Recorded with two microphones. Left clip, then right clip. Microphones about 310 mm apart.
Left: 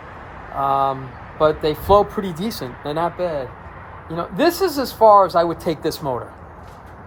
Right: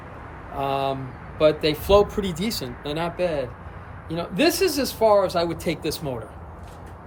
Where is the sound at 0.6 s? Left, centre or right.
Centre.